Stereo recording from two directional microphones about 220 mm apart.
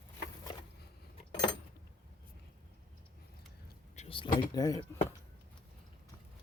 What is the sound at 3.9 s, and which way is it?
Speech, 25° left (ahead or behind).